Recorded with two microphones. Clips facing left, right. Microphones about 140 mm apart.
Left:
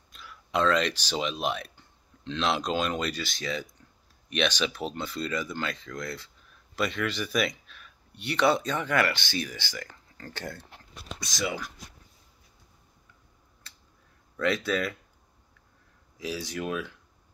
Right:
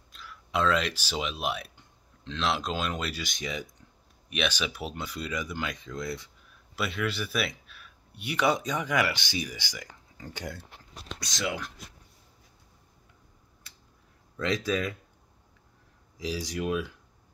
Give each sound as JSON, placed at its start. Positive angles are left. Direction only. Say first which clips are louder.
{"t": 0.1, "sound": "speech", "louder": "left 2 dB", "side_deg": 0}
{"t": 11.1, "sound": "speech", "louder": "left 1 dB", "side_deg": 0}
{"t": 14.3, "sound": "speech", "louder": "left 1 dB", "side_deg": -15}
{"t": 16.5, "sound": "speech", "louder": "right 3 dB", "side_deg": -10}